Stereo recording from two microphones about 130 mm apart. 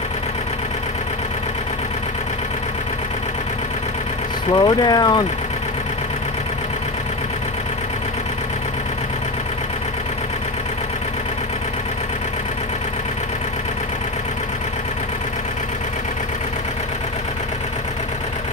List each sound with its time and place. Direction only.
4.5 s speech: 35° left (ahead or behind)